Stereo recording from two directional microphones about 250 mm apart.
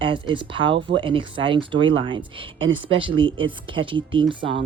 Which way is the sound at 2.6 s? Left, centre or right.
Right.